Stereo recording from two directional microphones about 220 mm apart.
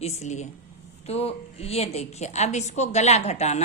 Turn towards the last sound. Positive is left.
turn(degrees=30)  # may be behind; listen again after turning